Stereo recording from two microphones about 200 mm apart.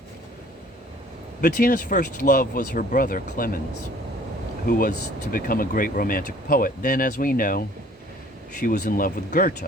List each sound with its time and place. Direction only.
1.4 s speech: 45° left (ahead or behind)
4.6 s speech: 45° left (ahead or behind)
8.6 s speech: 45° left (ahead or behind)